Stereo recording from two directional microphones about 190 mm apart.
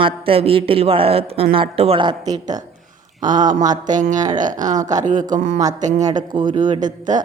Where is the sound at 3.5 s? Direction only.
40° right (ahead or behind).